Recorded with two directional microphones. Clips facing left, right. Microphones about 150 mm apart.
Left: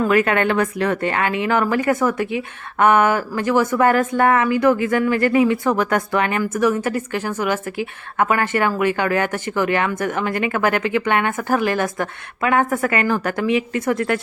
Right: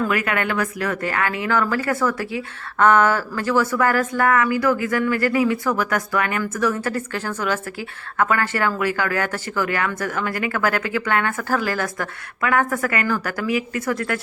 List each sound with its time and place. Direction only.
0.0 s a woman's voice: 30° left (ahead or behind)